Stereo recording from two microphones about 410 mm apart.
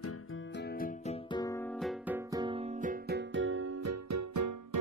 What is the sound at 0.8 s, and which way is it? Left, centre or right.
Music, centre.